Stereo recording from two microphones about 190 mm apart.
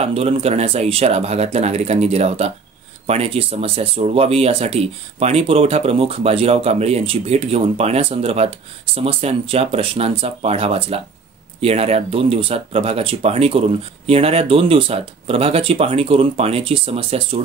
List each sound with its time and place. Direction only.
0.0 s speech: 30° right (ahead or behind)